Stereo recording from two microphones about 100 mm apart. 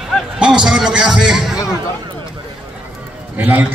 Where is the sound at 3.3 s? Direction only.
15° right (ahead or behind).